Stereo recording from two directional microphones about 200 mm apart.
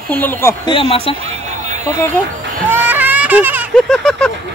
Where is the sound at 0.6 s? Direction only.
25° left (ahead or behind).